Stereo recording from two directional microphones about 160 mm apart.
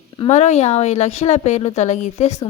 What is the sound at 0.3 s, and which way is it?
A woman's voice, 45° left (ahead or behind).